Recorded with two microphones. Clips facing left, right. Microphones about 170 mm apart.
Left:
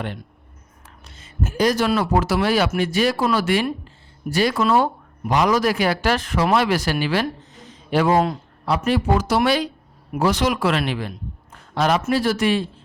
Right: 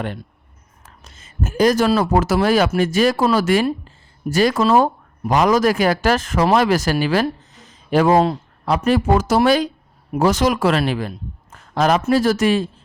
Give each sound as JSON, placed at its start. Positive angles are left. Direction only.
{"t": 1.2, "sound": "speech", "side_deg": -45}
{"t": 3.8, "sound": "a sound", "side_deg": -45}
{"t": 5.3, "sound": "speech", "side_deg": -45}